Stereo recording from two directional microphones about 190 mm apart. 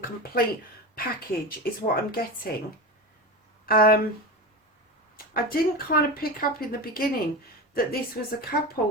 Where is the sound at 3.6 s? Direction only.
50° left (ahead or behind).